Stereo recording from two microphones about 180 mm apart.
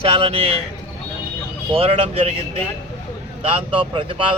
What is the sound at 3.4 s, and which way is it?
Speech, 30° right (ahead or behind).